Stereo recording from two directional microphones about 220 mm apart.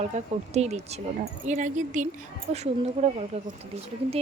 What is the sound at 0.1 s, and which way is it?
Speech, 30° right (ahead or behind).